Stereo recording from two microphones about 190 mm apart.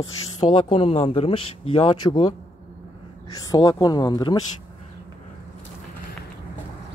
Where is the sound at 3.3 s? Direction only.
20° left (ahead or behind).